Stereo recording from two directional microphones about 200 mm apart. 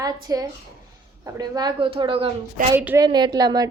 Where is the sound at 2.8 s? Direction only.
10° right (ahead or behind).